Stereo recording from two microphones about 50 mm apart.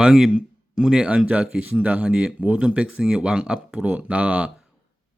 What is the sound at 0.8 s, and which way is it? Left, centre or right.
Speech, centre.